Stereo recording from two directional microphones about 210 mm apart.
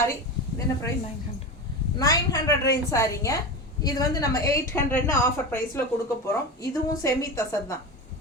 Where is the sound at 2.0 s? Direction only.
15° left (ahead or behind).